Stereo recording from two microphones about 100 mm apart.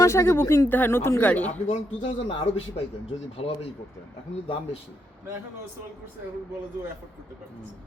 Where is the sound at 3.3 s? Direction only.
75° left (ahead or behind).